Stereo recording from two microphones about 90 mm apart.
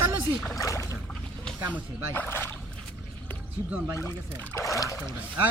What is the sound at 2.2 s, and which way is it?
Speech, 25° left (ahead or behind).